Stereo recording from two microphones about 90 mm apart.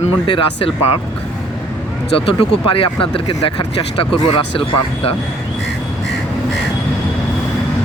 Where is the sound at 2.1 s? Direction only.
75° left (ahead or behind).